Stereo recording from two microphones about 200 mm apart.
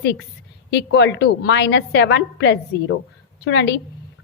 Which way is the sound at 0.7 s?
60° left (ahead or behind).